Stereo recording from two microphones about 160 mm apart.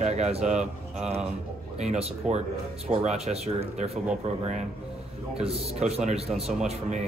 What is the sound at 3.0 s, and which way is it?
Speech, 40° right (ahead or behind).